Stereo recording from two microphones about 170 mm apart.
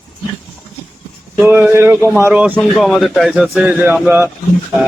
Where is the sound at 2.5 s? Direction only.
Centre (ahead or behind).